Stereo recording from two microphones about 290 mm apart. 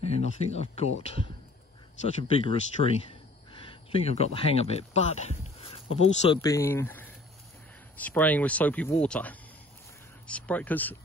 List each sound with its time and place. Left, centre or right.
0.0 s speech: left; by 11.0 s centre